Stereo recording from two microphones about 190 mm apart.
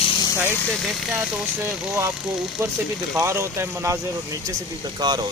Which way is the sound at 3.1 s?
15° right (ahead or behind).